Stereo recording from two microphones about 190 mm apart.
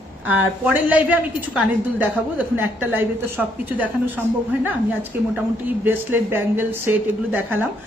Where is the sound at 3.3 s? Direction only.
10° right (ahead or behind).